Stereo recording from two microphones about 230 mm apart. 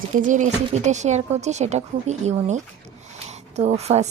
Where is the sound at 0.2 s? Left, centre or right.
Right.